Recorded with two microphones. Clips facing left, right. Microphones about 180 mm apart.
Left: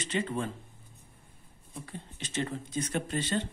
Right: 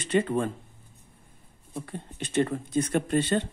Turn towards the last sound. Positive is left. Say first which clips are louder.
# right 7 dB
turn(degrees=-55)  # may be behind; listen again after turning